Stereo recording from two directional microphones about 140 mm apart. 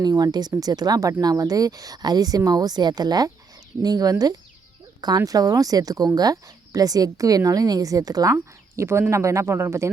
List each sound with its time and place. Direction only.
0.0 s a woman's voice: 30° right (ahead or behind)